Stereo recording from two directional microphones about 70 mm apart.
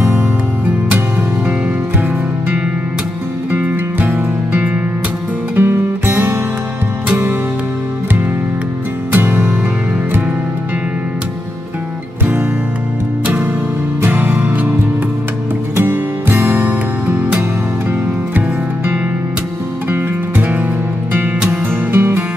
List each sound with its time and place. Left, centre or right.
3.5 s music: right
9.1 s music: right
14.0 s music: right
15.7 s music: right
19.9 s music: right